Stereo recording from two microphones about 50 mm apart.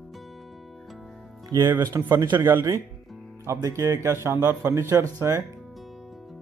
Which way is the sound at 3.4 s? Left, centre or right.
Right.